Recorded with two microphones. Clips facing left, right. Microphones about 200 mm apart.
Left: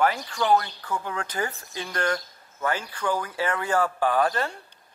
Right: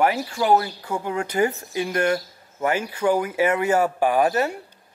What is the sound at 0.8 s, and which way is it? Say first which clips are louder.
Speech: right 5 dB; 25° right (ahead or behind).